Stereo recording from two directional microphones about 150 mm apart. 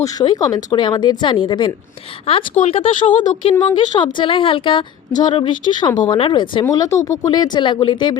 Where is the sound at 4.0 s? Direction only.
30° left (ahead or behind).